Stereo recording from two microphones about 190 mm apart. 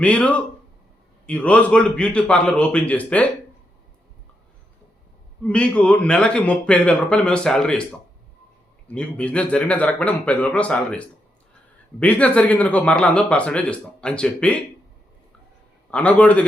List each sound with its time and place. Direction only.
0.0 s speech: 5° left (ahead or behind)
5.5 s a man's voice: 5° left (ahead or behind)
15.9 s speech: 5° left (ahead or behind)